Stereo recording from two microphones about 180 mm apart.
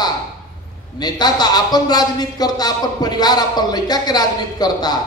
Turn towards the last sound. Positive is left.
turn(degrees=20)  # may be behind; listen again after turning